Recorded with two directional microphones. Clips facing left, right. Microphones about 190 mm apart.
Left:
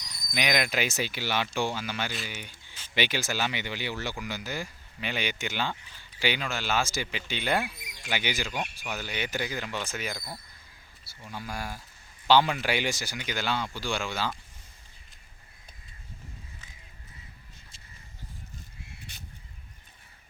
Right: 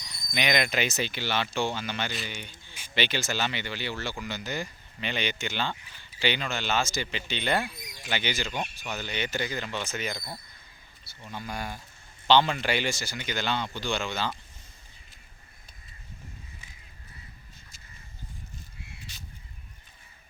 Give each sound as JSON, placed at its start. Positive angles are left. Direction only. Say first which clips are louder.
{"t": 0.3, "sound": "speech", "louder": "right 1 dB", "side_deg": 5}
{"t": 19.1, "sound": "crow", "louder": "right 1 dB", "side_deg": 60}